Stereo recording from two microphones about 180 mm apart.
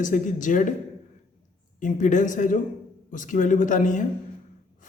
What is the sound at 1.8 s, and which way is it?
Speech, 45° left (ahead or behind).